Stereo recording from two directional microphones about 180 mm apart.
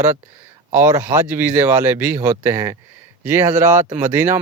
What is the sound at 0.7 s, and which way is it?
Speech, 15° right (ahead or behind).